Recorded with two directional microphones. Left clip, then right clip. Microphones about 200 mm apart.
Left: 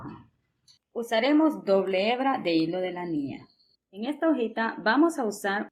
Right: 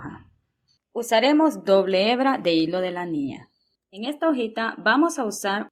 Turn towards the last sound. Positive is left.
turn(degrees=-30)  # may be behind; listen again after turning